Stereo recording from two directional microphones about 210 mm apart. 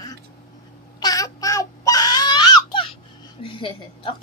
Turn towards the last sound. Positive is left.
turn(degrees=25)  # may be behind; listen again after turning